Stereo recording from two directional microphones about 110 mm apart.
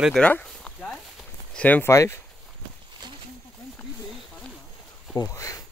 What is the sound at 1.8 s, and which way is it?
Speech, 25° left (ahead or behind).